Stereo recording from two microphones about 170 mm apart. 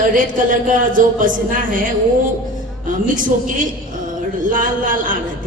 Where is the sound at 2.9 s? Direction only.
50° right (ahead or behind).